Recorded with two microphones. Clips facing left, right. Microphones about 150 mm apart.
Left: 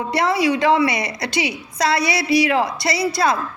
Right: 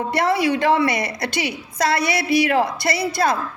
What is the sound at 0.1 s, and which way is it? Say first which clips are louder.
A woman's voice: left 1 dB; 50° right (ahead or behind).